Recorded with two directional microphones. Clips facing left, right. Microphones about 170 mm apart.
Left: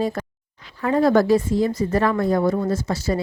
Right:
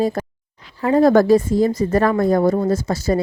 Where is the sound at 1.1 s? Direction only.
45° right (ahead or behind).